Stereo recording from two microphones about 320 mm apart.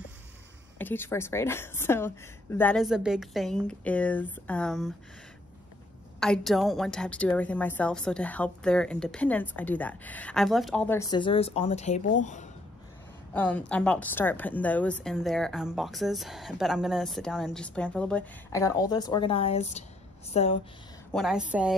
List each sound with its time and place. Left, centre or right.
0.7 s a woman's voice: centre
6.1 s a woman's voice: centre; by 12.4 s left
13.3 s a woman's voice: centre
21.1 s a woman's voice: centre